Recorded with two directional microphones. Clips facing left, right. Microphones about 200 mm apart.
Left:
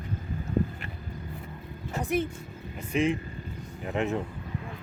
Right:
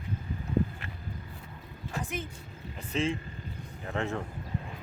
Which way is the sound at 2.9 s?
15° left (ahead or behind).